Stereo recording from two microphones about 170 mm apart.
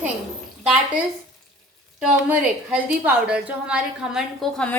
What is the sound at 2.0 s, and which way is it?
A woman's voice, 5° right (ahead or behind).